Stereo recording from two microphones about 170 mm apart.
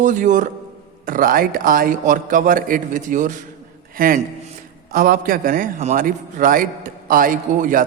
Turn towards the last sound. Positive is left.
turn(degrees=-55)  # may be behind; listen again after turning